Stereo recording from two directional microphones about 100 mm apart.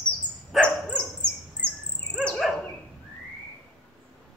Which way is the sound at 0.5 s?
10° left (ahead or behind).